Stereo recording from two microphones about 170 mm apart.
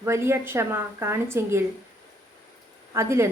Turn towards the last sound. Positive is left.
turn(degrees=-15)  # may be behind; listen again after turning